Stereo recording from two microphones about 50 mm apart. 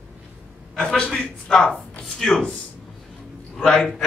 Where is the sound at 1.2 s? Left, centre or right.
Centre.